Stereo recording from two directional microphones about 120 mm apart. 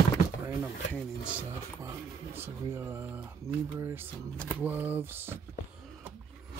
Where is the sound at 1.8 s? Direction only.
20° right (ahead or behind).